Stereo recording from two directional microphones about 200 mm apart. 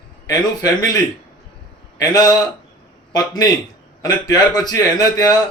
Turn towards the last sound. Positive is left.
turn(degrees=20)  # may be behind; listen again after turning